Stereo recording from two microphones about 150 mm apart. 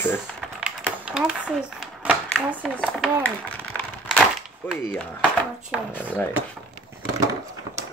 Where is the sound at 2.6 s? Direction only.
5° left (ahead or behind).